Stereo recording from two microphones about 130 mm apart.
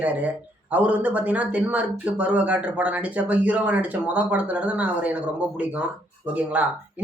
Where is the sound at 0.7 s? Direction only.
10° right (ahead or behind).